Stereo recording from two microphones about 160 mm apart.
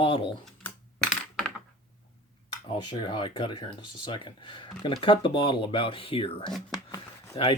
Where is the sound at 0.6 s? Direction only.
5° left (ahead or behind).